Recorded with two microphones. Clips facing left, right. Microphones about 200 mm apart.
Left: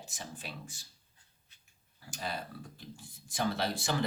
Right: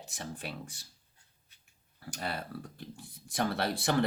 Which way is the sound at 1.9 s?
60° right (ahead or behind).